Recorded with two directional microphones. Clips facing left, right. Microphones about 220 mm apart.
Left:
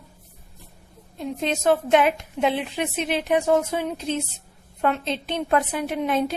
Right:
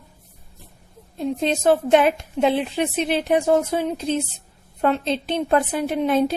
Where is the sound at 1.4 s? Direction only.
30° right (ahead or behind).